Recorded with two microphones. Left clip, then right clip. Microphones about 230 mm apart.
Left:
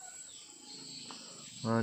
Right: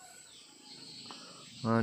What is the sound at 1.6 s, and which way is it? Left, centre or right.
Speech, centre.